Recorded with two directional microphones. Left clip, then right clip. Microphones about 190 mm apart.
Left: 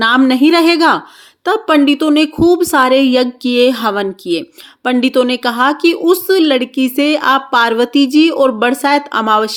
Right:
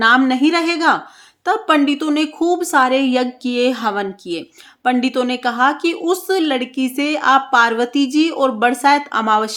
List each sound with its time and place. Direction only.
0.0 s a woman's voice: 25° left (ahead or behind)